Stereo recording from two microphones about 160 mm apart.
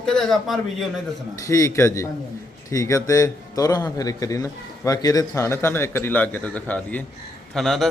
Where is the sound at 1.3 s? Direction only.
20° left (ahead or behind).